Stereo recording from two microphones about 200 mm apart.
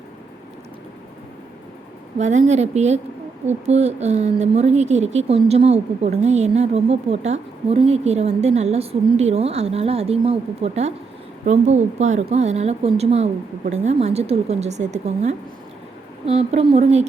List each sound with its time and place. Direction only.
2.1 s a woman's voice: 35° right (ahead or behind)